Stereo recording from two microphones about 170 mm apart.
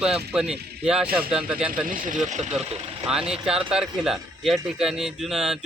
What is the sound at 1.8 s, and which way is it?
Speech, 50° right (ahead or behind).